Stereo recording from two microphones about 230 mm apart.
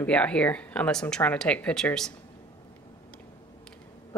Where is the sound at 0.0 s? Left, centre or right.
Centre.